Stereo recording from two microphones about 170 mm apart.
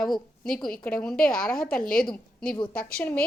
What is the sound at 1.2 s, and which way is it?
Speech, 55° left (ahead or behind).